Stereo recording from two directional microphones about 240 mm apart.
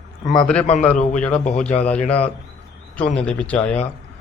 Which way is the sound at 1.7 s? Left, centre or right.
Centre.